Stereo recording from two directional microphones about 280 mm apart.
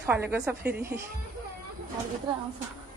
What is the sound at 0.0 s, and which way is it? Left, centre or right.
Speech, centre.